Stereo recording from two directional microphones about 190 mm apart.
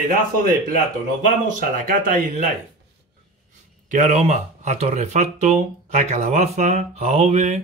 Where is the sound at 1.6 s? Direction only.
45° right (ahead or behind).